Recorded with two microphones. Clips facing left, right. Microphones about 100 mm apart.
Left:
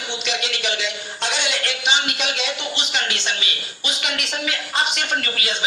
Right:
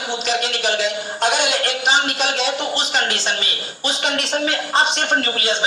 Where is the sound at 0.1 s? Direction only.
40° right (ahead or behind).